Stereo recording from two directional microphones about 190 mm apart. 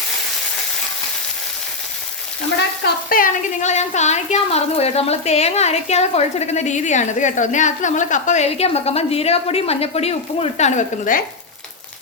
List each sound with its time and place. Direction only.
2.8 s a woman's voice: 45° left (ahead or behind)